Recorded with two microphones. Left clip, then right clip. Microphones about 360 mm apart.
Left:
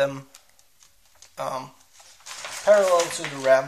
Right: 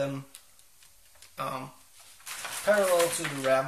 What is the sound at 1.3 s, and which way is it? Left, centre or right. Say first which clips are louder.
Speech: left 5 dB; centre.